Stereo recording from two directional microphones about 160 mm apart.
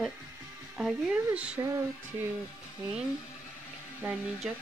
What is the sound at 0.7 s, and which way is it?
Speech, centre (ahead or behind).